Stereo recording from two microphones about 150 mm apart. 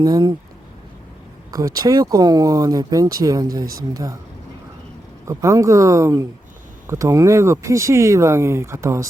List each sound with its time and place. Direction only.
0.0 s speech: 25° right (ahead or behind)
1.5 s speech: 25° right (ahead or behind)
5.2 s speech: 20° right (ahead or behind)